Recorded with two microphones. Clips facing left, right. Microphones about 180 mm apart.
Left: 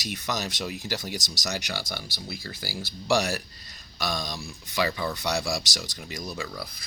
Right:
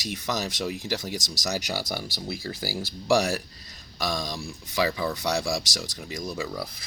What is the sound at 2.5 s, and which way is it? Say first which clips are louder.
Speech: right 5 dB; 45° right (ahead or behind).